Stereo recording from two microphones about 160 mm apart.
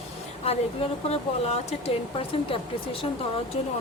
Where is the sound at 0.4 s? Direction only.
40° left (ahead or behind).